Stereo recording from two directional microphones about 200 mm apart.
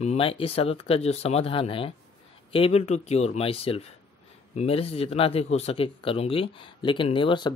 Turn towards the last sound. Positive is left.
turn(degrees=25)  # may be behind; listen again after turning